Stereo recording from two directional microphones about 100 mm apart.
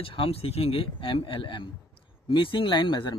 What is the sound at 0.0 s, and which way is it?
Speech, 60° left (ahead or behind).